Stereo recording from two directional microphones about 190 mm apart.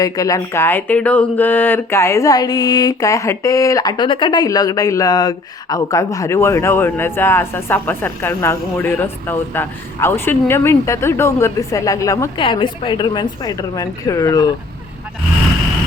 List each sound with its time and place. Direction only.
0.0 s speech: 20° left (ahead or behind)